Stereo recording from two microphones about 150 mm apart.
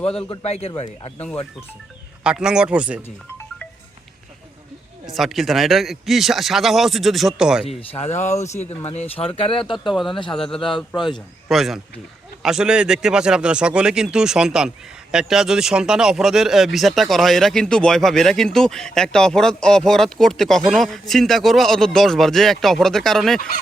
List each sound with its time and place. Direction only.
0.0 s speech: 5° left (ahead or behind)
0.3 s speech: 45° left (ahead or behind)
2.2 s a man's voice: 5° right (ahead or behind)
5.1 s speech: centre (ahead or behind)
7.8 s speech: 45° left (ahead or behind)
9.8 s speech: centre (ahead or behind)